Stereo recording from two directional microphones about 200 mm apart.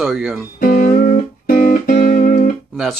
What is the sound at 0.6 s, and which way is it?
Music, 45° left (ahead or behind).